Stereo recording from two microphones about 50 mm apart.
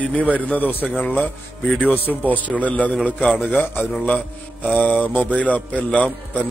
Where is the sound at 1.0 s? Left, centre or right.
Left.